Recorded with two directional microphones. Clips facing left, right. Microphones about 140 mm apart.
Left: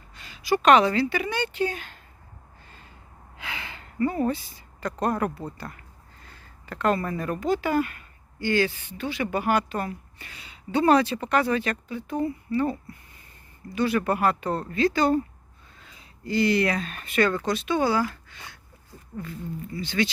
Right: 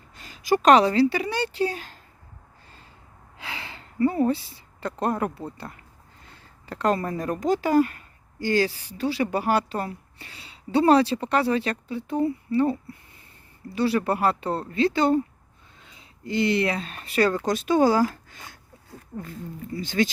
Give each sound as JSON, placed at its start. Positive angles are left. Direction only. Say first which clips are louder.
{"t": 0.1, "sound": "a woman's voice", "louder": "right 2 dB", "side_deg": -45}
{"t": 3.3, "sound": "a sound", "louder": "even", "side_deg": -30}
{"t": 5.5, "sound": "speech", "louder": "even", "side_deg": -20}
{"t": 6.2, "sound": "a sound", "louder": "right 2 dB", "side_deg": -30}
{"t": 7.3, "sound": "speech", "louder": "right 4 dB", "side_deg": -40}
{"t": 17.4, "sound": "speech", "louder": "right 4 dB", "side_deg": -45}
{"t": 19.7, "sound": "speech", "louder": "right 2 dB", "side_deg": -45}